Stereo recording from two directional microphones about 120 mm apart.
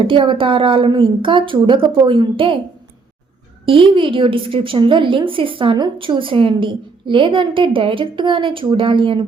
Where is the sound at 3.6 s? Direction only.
45° right (ahead or behind).